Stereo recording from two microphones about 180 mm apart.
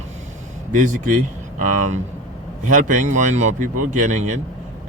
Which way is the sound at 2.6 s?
45° right (ahead or behind).